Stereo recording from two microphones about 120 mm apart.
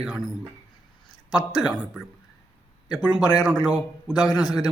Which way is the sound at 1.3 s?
5° right (ahead or behind).